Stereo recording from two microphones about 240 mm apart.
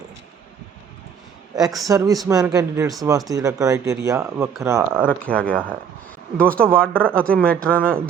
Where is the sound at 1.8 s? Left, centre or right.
Centre.